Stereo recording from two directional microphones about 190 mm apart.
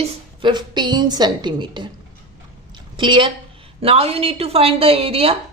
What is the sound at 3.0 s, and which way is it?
A woman's voice, 25° right (ahead or behind).